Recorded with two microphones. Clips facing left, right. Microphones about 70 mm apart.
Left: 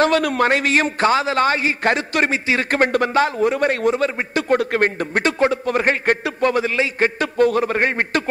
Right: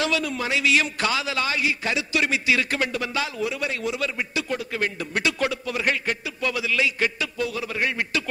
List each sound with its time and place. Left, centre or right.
0.0 s a man's voice: left
2.7 s a man's voice: left